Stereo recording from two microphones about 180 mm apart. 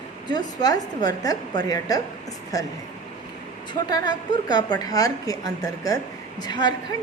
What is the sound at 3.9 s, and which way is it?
A woman's voice, 25° left (ahead or behind).